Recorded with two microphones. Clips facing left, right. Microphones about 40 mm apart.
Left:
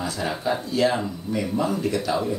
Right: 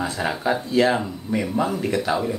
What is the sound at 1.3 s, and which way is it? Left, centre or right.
Speech, centre.